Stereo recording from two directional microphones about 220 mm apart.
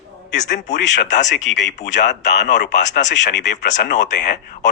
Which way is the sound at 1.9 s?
50° left (ahead or behind).